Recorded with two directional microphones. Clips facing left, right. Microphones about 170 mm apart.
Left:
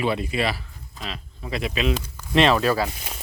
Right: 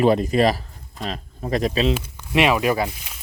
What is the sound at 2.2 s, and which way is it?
Speech, 10° right (ahead or behind).